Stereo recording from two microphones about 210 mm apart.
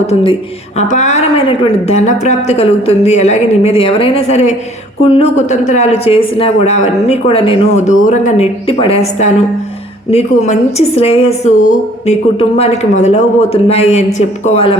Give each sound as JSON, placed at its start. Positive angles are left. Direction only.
{"t": 0.1, "sound": "a woman's voice", "side_deg": 25}